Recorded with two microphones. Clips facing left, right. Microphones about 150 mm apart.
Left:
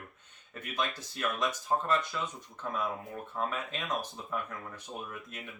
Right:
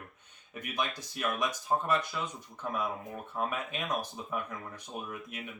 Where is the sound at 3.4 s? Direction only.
10° right (ahead or behind).